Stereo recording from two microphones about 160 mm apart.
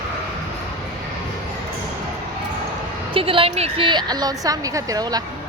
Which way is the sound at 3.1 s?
35° right (ahead or behind).